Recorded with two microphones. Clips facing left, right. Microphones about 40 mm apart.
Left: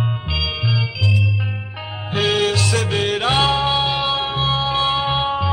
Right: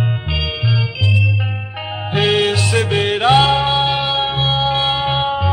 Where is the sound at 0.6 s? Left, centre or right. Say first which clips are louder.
Right 2 dB; centre.